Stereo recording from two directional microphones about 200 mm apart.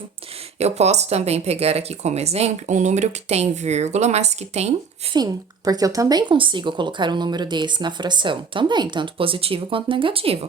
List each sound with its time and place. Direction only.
0.6 s speech: 35° right (ahead or behind)
5.1 s a woman's voice: 20° right (ahead or behind)